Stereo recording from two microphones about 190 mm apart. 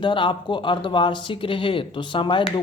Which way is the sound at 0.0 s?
25° left (ahead or behind).